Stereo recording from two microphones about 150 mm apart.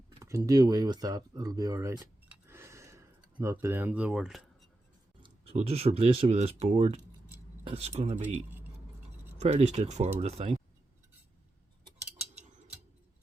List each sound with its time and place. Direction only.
0.2 s speech: 20° right (ahead or behind)
2.5 s a sound: 15° right (ahead or behind)
3.4 s speech: 15° right (ahead or behind); by 4.7 s centre (ahead or behind)
5.2 s speech: 45° right (ahead or behind)
9.4 s speech: 50° right (ahead or behind)